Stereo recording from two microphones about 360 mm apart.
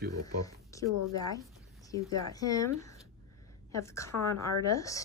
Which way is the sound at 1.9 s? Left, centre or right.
Centre.